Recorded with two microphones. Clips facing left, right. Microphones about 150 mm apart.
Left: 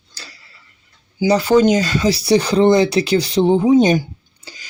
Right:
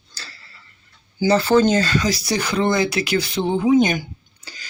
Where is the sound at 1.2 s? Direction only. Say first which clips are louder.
Left 3 dB; 15° left (ahead or behind); by 4.0 s 30° left (ahead or behind).